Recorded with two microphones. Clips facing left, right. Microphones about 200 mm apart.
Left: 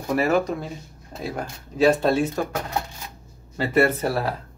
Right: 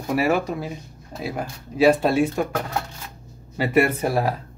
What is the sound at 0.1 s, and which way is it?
Speech, 10° right (ahead or behind).